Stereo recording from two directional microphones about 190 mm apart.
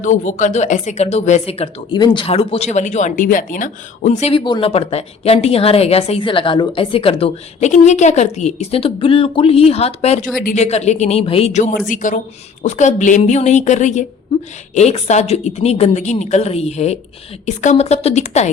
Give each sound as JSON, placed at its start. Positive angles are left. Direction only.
{"t": 0.0, "sound": "a woman's voice", "side_deg": 40}
{"t": 4.4, "sound": "a woman's voice", "side_deg": 25}